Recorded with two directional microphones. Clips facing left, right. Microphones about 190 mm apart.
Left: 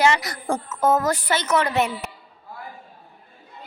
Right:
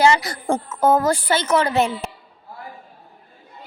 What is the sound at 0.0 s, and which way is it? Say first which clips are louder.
A woman's voice: right 3 dB; 30° right (ahead or behind).